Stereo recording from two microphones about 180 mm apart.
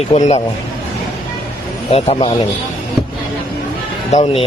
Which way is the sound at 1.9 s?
30° left (ahead or behind).